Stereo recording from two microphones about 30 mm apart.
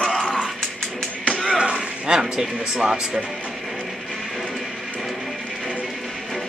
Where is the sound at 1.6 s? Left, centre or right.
Right.